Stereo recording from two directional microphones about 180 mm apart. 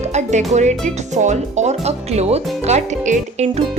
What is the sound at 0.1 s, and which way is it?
Speech, 40° right (ahead or behind).